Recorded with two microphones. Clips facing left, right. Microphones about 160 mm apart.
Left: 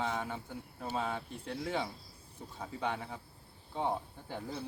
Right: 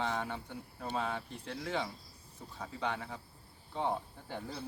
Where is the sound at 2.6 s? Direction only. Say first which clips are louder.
Left 1 dB; 10° left (ahead or behind).